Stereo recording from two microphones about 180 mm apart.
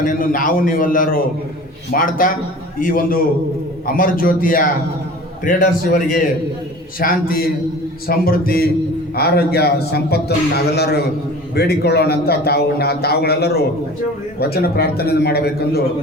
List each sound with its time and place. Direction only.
0.0 s a man's voice: 50° left (ahead or behind)